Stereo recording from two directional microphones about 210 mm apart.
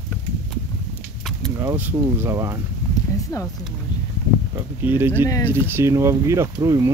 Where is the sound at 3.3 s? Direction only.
15° left (ahead or behind).